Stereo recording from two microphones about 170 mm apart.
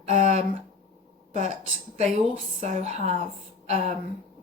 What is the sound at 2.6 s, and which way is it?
Speech, 40° right (ahead or behind).